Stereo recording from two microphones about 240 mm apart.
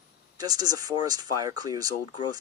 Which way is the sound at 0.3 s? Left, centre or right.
Centre.